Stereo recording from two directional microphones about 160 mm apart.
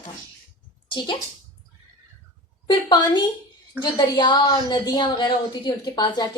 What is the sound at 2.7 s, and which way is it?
A woman's voice, 25° left (ahead or behind).